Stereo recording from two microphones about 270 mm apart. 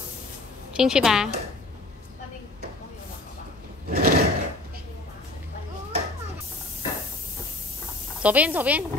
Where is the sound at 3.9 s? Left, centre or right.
Right.